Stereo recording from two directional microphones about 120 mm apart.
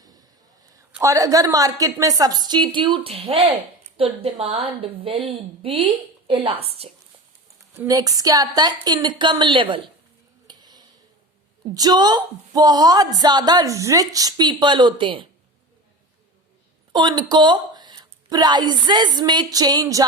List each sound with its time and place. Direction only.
1.0 s a woman's voice: 30° right (ahead or behind); by 6.9 s 55° right (ahead or behind)
7.9 s speech: 30° right (ahead or behind)
10.4 s a sound: 35° right (ahead or behind)
11.7 s speech: 35° right (ahead or behind)
16.9 s a woman's voice: 40° right (ahead or behind)